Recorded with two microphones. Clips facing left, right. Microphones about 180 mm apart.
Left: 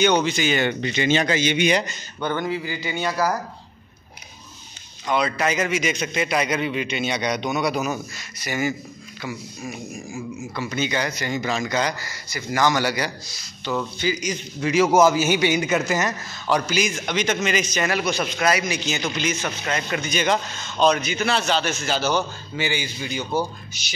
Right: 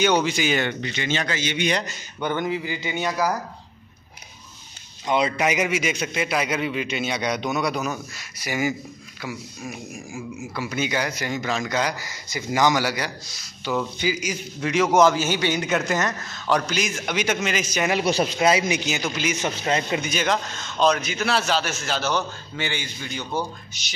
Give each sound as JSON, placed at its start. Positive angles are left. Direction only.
{"t": 0.0, "sound": "speech", "side_deg": -5}
{"t": 0.9, "sound": "a man's voice", "side_deg": 15}
{"t": 1.7, "sound": "a man's voice", "side_deg": 5}
{"t": 2.1, "sound": "speech", "side_deg": -15}
{"t": 5.0, "sound": "a man's voice", "side_deg": -20}
{"t": 8.2, "sound": "a man's voice", "side_deg": -10}
{"t": 12.0, "sound": "speech", "side_deg": -15}
{"t": 12.8, "sound": "a man's voice", "side_deg": 0}
{"t": 17.9, "sound": "speech", "side_deg": -35}
{"t": 18.8, "sound": "speech", "side_deg": -10}
{"t": 19.4, "sound": "speech", "side_deg": -25}
{"t": 20.0, "sound": "a man's voice", "side_deg": -5}